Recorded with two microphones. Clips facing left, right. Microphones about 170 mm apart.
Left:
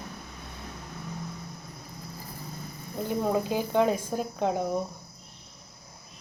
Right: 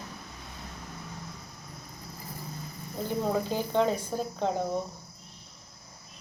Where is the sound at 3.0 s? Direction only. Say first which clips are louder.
Left 2 dB; 15° left (ahead or behind).